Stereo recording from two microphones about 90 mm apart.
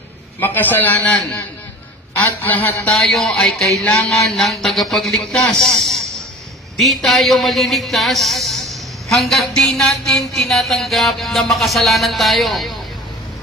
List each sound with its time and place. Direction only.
0.4 s a man's voice: 20° left (ahead or behind)
2.4 s a man's voice: 20° left (ahead or behind)
2.9 s a man's voice: 5° left (ahead or behind)